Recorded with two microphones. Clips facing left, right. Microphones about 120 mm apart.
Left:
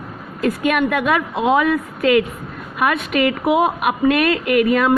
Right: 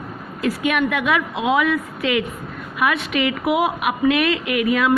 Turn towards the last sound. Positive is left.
turn(degrees=45)  # may be behind; listen again after turning